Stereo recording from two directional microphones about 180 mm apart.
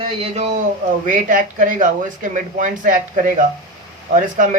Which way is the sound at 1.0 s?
45° right (ahead or behind).